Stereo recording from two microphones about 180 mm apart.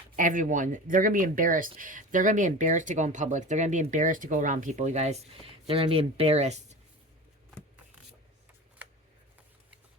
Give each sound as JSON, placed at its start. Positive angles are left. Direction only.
{"t": 0.2, "sound": "speech", "side_deg": -45}